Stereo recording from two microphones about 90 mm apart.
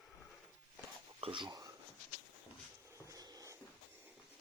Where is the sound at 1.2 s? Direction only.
70° right (ahead or behind).